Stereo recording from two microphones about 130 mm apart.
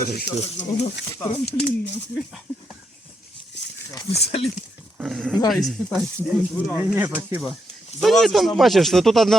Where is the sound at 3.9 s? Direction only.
25° left (ahead or behind).